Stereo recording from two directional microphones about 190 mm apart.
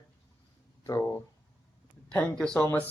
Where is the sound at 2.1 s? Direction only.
5° left (ahead or behind).